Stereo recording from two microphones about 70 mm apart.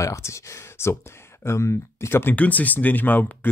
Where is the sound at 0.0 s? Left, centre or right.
Left.